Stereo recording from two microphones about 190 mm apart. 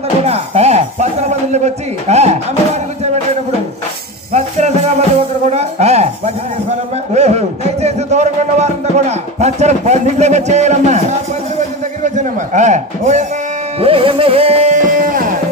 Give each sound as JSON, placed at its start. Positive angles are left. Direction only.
{"t": 0.2, "sound": "speech", "side_deg": -35}
{"t": 4.3, "sound": "music", "side_deg": -35}
{"t": 5.5, "sound": "speech", "side_deg": -35}
{"t": 7.2, "sound": "a man's voice", "side_deg": -35}
{"t": 12.0, "sound": "a sound", "side_deg": -40}
{"t": 13.7, "sound": "music", "side_deg": -30}